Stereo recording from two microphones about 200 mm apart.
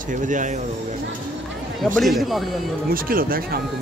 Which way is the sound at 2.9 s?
45° right (ahead or behind).